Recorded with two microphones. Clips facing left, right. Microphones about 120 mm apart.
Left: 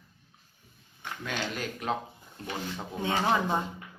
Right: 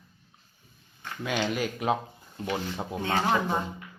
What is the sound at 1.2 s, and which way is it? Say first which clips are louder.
Speech: right 6 dB; 10° right (ahead or behind).